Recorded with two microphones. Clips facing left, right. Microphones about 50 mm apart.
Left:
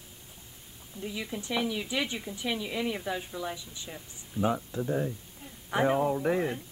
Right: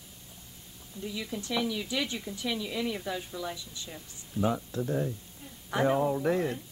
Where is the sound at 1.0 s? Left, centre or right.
Centre.